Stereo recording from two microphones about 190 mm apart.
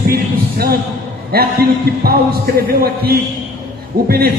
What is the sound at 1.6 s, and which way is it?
Music, 55° right (ahead or behind).